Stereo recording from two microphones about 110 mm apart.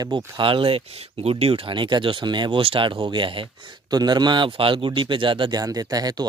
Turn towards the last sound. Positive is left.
turn(degrees=-35)  # may be behind; listen again after turning